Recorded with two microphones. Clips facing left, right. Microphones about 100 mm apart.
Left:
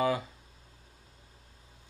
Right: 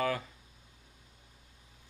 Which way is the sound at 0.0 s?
15° left (ahead or behind).